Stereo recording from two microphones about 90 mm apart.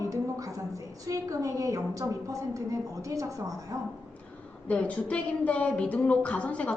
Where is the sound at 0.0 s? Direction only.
40° right (ahead or behind).